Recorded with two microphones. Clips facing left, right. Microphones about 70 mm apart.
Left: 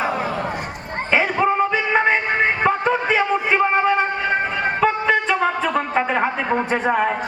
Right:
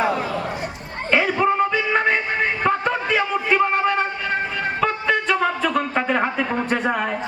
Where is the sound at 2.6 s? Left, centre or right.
Centre.